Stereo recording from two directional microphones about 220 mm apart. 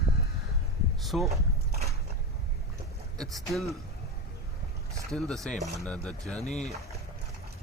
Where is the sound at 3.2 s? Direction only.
Centre (ahead or behind).